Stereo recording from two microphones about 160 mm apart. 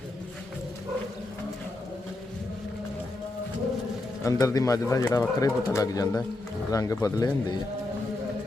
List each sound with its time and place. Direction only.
4.2 s speech: 20° left (ahead or behind)